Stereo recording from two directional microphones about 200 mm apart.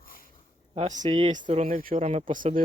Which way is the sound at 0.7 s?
35° right (ahead or behind).